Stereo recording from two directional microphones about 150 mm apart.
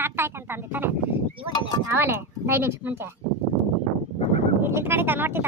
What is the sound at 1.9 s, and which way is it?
A woman's voice, 15° right (ahead or behind).